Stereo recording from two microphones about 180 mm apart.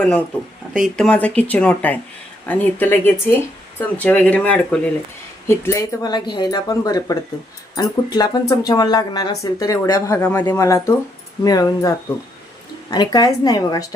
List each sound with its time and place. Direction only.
0.7 s speech: centre (ahead or behind); by 13.8 s 20° left (ahead or behind)